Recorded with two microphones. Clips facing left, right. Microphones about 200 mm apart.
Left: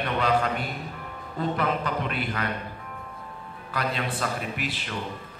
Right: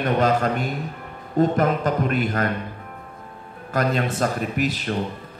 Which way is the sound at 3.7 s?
45° right (ahead or behind).